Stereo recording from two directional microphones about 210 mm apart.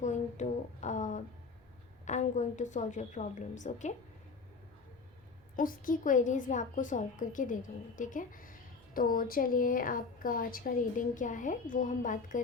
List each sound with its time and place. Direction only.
0.0 s a sound: 35° left (ahead or behind)
2.0 s a woman's voice: 35° left (ahead or behind)
5.5 s a woman's voice: 40° left (ahead or behind)